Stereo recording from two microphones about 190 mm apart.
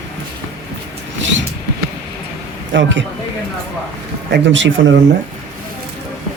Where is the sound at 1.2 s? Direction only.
75° right (ahead or behind).